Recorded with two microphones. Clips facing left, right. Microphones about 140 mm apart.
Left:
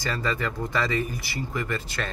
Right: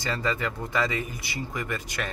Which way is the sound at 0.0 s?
20° right (ahead or behind).